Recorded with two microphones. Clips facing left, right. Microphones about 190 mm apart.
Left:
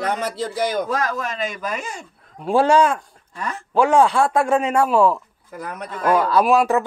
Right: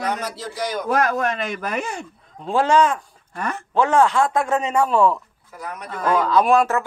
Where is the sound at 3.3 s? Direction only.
60° right (ahead or behind).